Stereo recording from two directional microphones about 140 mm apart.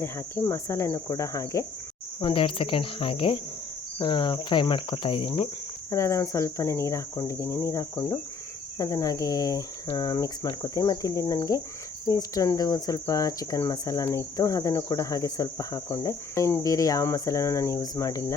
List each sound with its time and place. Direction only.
0.0 s speech: 20° left (ahead or behind)
2.2 s cricket: 40° left (ahead or behind)
5.9 s speech: 20° left (ahead or behind)